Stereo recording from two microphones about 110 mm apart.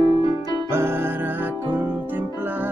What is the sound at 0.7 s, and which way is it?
Music, 20° right (ahead or behind).